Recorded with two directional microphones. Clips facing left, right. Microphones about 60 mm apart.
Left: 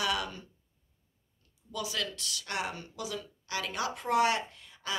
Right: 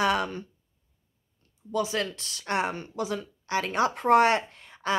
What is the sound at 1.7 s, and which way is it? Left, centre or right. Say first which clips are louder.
Speech: right 8 dB; right.